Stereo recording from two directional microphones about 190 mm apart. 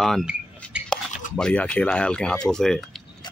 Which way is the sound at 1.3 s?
5° left (ahead or behind).